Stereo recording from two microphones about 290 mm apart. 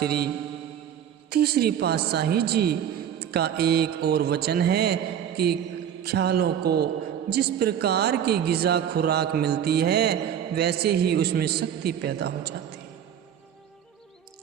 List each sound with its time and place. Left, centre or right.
0.0 s a man's voice: right
1.3 s a man's voice: right
6.0 s a man's voice: right